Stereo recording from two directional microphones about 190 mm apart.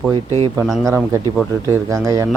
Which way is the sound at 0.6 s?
Centre (ahead or behind).